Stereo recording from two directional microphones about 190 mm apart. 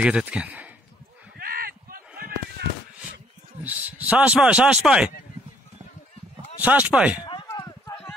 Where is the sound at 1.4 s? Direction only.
50° right (ahead or behind).